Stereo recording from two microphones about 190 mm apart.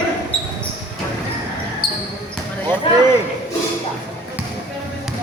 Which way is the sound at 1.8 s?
55° left (ahead or behind).